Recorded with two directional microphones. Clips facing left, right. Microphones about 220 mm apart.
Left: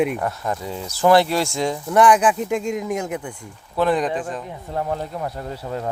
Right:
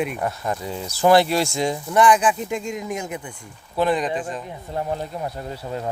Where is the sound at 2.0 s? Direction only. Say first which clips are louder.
Left 2 dB; 5° left (ahead or behind).